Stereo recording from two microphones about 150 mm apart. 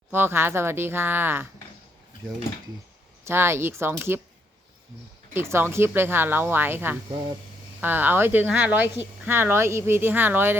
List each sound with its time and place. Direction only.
0.1 s speech: 15° right (ahead or behind)
3.2 s speech: 15° right (ahead or behind)
5.3 s speech: 15° right (ahead or behind)